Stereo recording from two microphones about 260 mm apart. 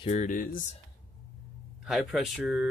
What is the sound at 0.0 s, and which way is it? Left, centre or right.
Speech, left.